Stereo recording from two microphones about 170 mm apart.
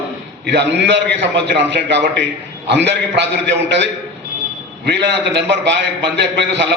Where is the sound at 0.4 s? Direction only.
90° right.